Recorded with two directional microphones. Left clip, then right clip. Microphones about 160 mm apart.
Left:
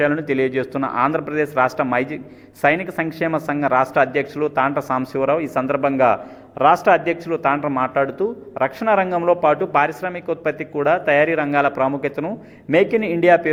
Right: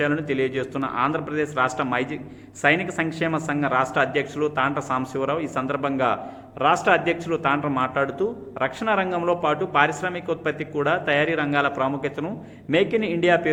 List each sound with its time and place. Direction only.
0.0 s a man's voice: 30° left (ahead or behind)